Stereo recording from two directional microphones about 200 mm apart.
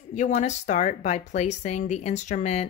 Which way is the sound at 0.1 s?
35° left (ahead or behind).